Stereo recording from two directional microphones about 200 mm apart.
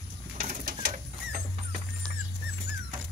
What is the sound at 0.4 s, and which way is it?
Bird, 50° right (ahead or behind).